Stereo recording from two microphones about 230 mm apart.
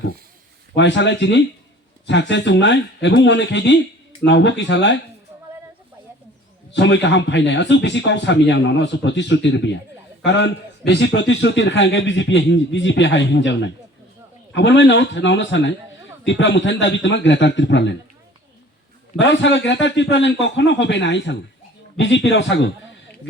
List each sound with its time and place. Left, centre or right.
0.8 s a man's voice: left
6.7 s a man's voice: left
19.2 s a man's voice: left